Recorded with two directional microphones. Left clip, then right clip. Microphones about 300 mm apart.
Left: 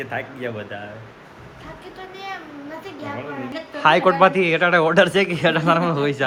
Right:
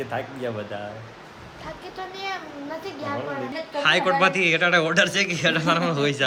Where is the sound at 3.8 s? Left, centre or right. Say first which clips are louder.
Left 5 dB; centre.